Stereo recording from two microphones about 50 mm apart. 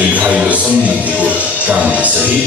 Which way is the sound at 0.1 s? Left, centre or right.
Right.